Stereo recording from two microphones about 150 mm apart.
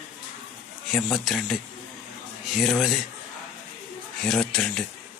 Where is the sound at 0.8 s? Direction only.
Centre (ahead or behind).